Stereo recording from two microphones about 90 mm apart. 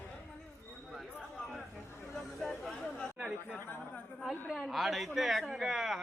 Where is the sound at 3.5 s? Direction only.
20° left (ahead or behind).